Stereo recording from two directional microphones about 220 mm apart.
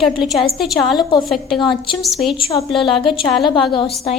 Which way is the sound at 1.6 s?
20° left (ahead or behind).